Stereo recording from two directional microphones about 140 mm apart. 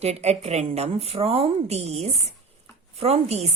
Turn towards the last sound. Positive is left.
turn(degrees=-50)  # may be behind; listen again after turning